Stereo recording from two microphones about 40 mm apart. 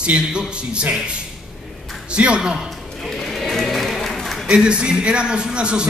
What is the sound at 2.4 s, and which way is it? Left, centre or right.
Speech, centre.